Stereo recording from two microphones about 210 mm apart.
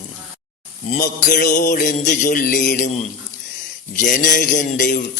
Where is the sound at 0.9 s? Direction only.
40° left (ahead or behind).